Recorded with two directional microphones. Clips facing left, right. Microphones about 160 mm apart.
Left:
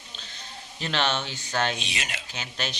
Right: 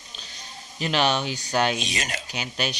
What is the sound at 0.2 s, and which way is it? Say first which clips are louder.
Sheep: right 1 dB; 15° right (ahead or behind).